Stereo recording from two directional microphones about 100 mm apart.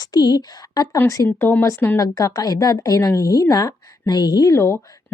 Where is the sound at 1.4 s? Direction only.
20° left (ahead or behind).